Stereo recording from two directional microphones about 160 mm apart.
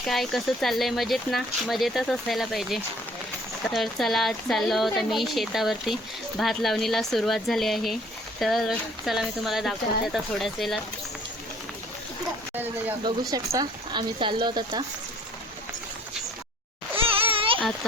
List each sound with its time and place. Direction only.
0.0 s speech: centre (ahead or behind)
13.1 s speech: 25° right (ahead or behind)
17.0 s a sound: 35° right (ahead or behind)